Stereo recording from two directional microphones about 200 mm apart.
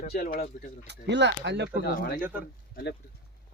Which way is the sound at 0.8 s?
60° right (ahead or behind).